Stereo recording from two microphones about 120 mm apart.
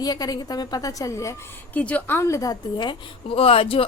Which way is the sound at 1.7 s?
15° left (ahead or behind).